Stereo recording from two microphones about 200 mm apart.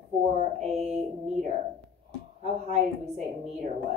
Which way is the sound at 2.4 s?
35° right (ahead or behind).